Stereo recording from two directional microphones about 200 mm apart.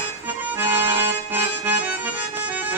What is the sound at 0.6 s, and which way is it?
Accordion, 10° right (ahead or behind).